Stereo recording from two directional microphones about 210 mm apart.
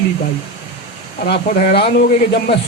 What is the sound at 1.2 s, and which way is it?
A man's voice, 45° left (ahead or behind).